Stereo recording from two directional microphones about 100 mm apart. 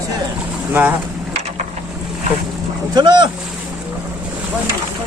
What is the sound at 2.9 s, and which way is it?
Speech, 45° right (ahead or behind).